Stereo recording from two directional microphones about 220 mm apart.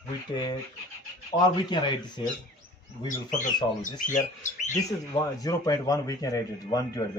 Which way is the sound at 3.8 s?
35° left (ahead or behind).